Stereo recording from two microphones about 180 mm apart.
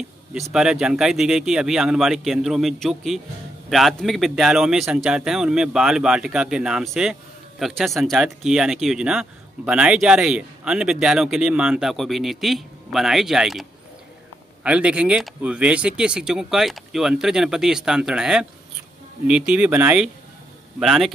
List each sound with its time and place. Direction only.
0.3 s a man's voice: 5° right (ahead or behind)